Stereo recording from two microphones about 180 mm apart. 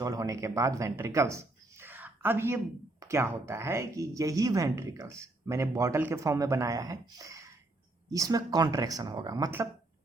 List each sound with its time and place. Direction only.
0.0 s speech: 20° right (ahead or behind)
1.8 s a sound: 10° right (ahead or behind)
3.0 s speech: 15° right (ahead or behind)